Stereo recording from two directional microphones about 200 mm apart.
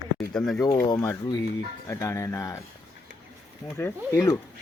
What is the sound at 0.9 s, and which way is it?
Speech, 15° left (ahead or behind).